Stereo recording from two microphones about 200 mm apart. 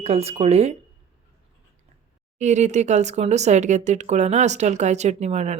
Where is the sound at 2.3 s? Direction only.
35° right (ahead or behind).